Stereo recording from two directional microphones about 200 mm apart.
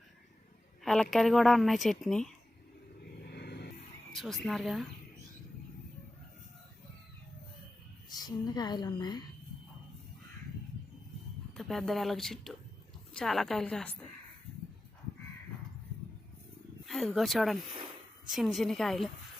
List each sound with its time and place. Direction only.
1.1 s speech: centre (ahead or behind)
3.2 s vehicle: 55° left (ahead or behind)
4.1 s speech: centre (ahead or behind)
8.1 s a woman's voice: 20° left (ahead or behind)
11.5 s speech: centre (ahead or behind)
16.8 s speech: centre (ahead or behind)